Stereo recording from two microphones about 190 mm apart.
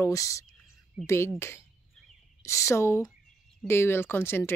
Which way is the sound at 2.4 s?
15° left (ahead or behind).